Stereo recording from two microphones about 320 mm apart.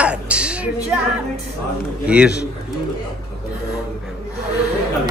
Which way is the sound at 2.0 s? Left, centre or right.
Centre.